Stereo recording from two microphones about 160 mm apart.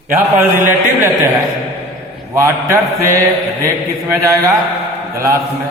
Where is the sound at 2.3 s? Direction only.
15° right (ahead or behind).